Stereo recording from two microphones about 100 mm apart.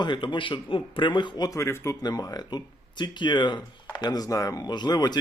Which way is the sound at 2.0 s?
40° left (ahead or behind).